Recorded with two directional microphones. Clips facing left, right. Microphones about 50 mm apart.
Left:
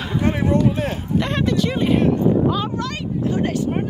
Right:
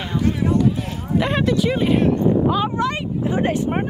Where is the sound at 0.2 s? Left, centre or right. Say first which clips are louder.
Left 1 dB; left.